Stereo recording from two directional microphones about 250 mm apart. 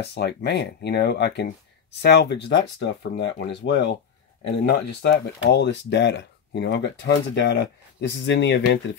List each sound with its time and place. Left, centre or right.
0.0 s speech: left